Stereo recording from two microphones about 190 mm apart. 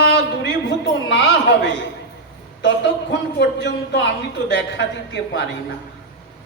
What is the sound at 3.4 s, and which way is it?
A man's voice, 65° left (ahead or behind).